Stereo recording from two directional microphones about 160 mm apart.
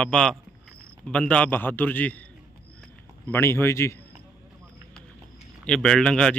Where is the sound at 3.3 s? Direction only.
15° left (ahead or behind).